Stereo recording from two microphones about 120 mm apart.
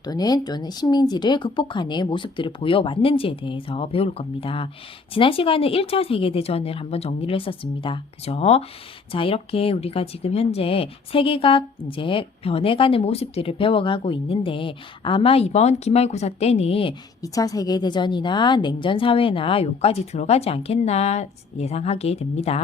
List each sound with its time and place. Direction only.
0.0 s speech: 35° left (ahead or behind); by 16.9 s 55° left (ahead or behind)
17.2 s speech: 30° left (ahead or behind); by 22.6 s 60° left (ahead or behind)